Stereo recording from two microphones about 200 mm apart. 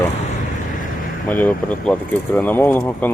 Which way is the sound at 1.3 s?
10° left (ahead or behind).